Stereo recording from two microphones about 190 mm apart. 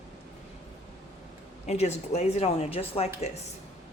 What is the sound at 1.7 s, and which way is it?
Speech, 35° left (ahead or behind).